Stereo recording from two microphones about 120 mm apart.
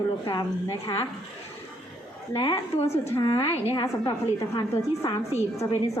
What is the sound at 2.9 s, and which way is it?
Speech, 20° left (ahead or behind).